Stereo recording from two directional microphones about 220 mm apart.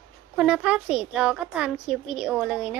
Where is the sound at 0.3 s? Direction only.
5° right (ahead or behind).